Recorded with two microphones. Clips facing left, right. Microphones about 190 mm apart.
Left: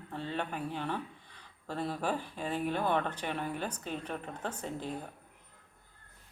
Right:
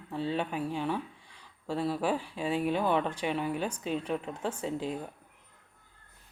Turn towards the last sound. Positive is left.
turn(degrees=-10)  # may be behind; listen again after turning